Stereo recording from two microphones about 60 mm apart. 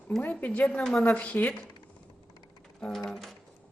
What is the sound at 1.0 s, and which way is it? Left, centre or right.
Speech, left.